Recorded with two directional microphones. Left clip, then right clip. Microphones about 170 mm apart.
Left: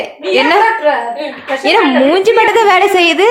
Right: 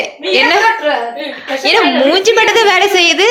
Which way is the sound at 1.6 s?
10° left (ahead or behind).